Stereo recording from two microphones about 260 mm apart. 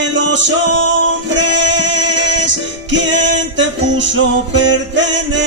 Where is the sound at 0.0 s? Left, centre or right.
Right.